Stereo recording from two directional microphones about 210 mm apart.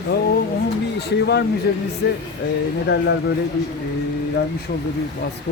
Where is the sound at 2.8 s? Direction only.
55° left (ahead or behind).